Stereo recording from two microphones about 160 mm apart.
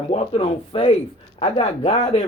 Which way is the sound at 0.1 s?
40° left (ahead or behind).